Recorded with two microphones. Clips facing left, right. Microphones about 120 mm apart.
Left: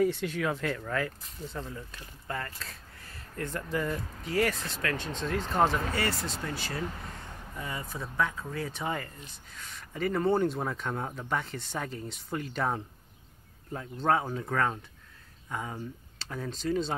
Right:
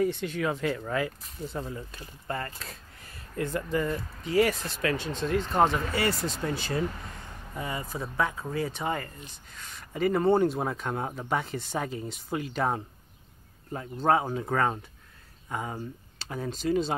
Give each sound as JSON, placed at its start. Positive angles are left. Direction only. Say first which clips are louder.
{"t": 0.0, "sound": "speech", "louder": "even", "side_deg": 5}
{"t": 3.4, "sound": "speech", "louder": "right 3 dB", "side_deg": -5}
{"t": 4.4, "sound": "speech", "louder": "right 4 dB", "side_deg": -10}
{"t": 5.9, "sound": "speech", "louder": "right 4 dB", "side_deg": -15}
{"t": 7.5, "sound": "speech", "louder": "right 4 dB", "side_deg": -10}